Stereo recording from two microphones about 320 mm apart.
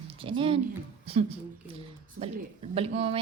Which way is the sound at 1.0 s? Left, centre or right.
Centre.